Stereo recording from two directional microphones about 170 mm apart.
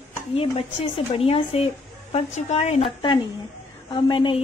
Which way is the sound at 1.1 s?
35° left (ahead or behind).